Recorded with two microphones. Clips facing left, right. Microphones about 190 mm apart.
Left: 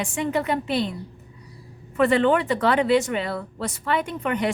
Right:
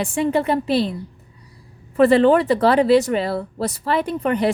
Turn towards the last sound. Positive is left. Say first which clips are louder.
# right 5 dB
turn(degrees=-35)  # may be behind; listen again after turning